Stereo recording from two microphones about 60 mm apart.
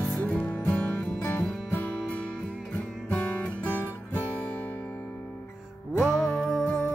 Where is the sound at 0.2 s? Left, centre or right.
Left.